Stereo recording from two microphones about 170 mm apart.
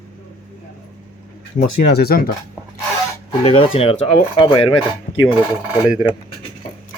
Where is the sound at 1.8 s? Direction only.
70° left (ahead or behind).